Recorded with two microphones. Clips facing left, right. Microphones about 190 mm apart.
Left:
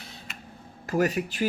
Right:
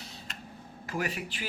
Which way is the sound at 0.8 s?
40° left (ahead or behind).